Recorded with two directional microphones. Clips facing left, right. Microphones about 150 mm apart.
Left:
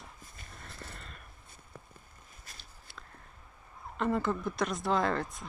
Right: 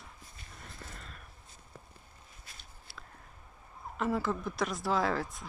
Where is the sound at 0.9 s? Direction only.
Centre (ahead or behind).